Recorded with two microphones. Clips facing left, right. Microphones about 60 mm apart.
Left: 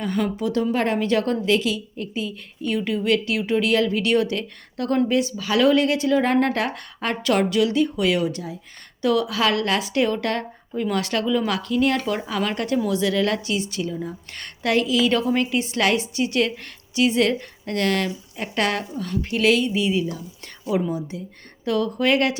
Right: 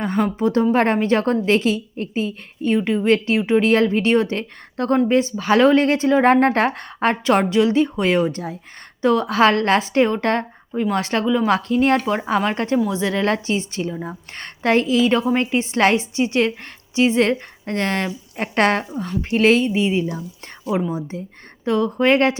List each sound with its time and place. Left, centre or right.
0.0 s a woman's voice: right
18.3 s a woman's voice: right